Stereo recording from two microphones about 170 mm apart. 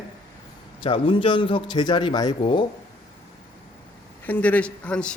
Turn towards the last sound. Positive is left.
turn(degrees=5)  # may be behind; listen again after turning